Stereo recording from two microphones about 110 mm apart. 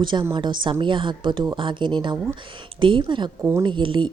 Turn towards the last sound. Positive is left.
turn(degrees=-45)  # may be behind; listen again after turning